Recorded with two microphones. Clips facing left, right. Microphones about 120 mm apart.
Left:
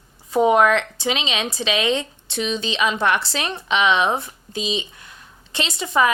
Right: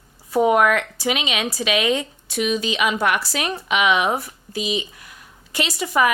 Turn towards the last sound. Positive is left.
turn(degrees=25)  # may be behind; listen again after turning